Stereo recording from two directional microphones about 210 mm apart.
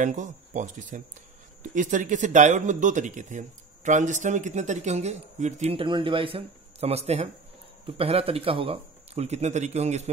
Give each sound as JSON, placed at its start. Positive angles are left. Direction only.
{"t": 0.0, "sound": "speech", "side_deg": -35}